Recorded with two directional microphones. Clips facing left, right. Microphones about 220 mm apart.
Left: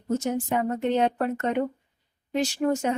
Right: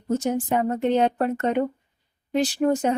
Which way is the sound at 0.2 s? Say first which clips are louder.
Right 3 dB; 35° right (ahead or behind).